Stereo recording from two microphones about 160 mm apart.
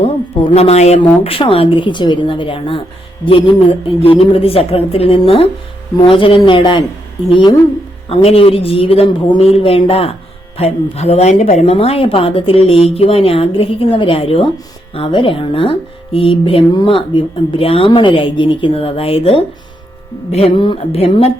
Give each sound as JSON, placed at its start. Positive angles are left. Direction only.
{"t": 0.0, "sound": "speech", "side_deg": 40}
{"t": 8.1, "sound": "speech", "side_deg": 40}